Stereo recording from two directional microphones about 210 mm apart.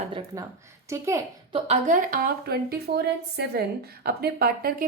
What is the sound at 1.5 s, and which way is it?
A woman's voice, 30° right (ahead or behind).